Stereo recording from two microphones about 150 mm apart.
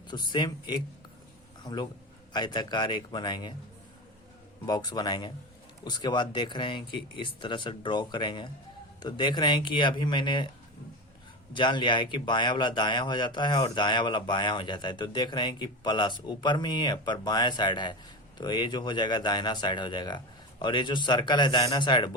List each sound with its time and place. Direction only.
0.1 s speech: 30° left (ahead or behind)
4.6 s speech: 25° left (ahead or behind)
11.5 s speech: 30° left (ahead or behind)